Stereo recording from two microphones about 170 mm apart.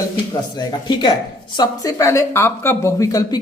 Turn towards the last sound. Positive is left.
turn(degrees=20)  # may be behind; listen again after turning